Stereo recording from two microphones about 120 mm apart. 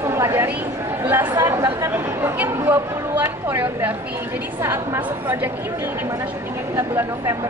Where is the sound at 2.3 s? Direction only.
20° right (ahead or behind).